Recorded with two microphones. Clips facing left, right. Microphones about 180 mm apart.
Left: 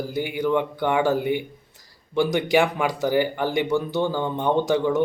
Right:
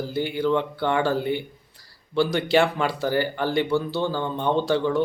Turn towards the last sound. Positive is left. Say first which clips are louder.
# left 1 dB
turn(degrees=15)  # may be behind; listen again after turning